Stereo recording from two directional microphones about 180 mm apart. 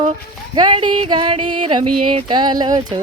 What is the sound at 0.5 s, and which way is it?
Music, 30° right (ahead or behind).